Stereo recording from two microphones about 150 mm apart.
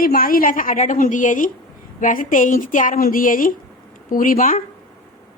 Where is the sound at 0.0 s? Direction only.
75° left (ahead or behind).